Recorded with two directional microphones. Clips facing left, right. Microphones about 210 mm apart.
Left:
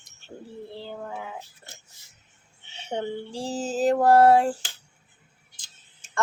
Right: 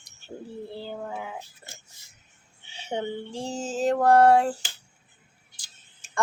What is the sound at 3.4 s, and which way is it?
Music, 35° left (ahead or behind).